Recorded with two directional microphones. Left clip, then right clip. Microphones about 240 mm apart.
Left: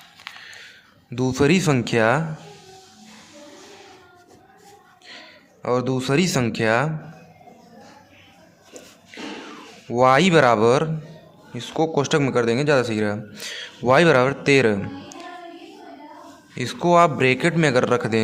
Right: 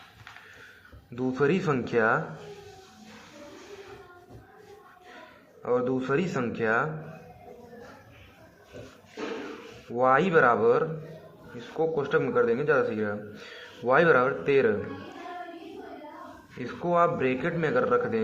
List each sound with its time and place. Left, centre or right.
1.1 s speech: left
5.6 s a man's voice: left
9.9 s a man's voice: left
16.6 s a man's voice: left